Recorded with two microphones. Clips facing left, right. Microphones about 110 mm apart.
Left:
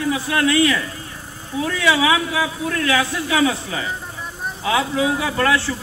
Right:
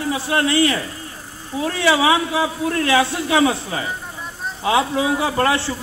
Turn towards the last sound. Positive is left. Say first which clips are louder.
# right 1 dB
turn(degrees=-25)  # may be behind; listen again after turning